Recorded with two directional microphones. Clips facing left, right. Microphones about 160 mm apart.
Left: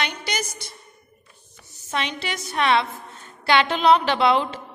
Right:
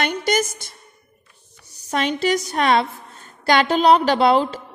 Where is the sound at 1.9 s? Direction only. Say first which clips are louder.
Right 8 dB; 40° right (ahead or behind).